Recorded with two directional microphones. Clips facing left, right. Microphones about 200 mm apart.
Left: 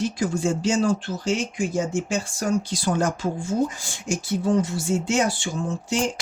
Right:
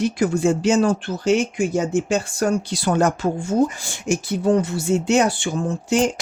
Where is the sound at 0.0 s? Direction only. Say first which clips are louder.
Right 5 dB; 65° right (ahead or behind).